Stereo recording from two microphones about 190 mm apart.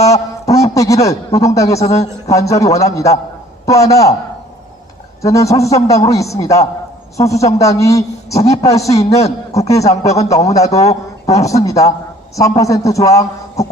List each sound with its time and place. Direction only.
0.0 s a man's voice: 15° left (ahead or behind)
5.2 s a man's voice: 15° left (ahead or behind)
9.1 s a man's voice: 35° left (ahead or behind)
9.6 s a man's voice: 15° left (ahead or behind)